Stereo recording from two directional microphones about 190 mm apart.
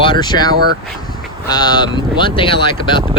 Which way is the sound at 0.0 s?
25° left (ahead or behind).